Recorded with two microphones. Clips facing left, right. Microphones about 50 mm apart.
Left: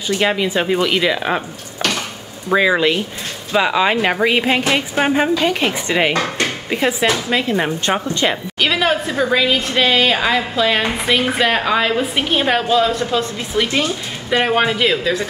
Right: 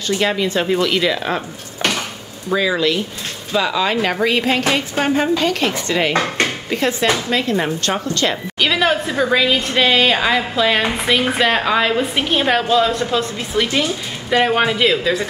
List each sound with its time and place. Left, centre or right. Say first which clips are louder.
0.1 s a woman's voice: left 1 dB; centre
2.5 s a woman's voice: left 3 dB; left
8.5 s a woman's voice: right 1 dB; centre